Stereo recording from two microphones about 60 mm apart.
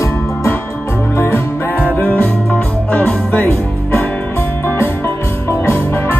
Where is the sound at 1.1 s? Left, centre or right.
Left.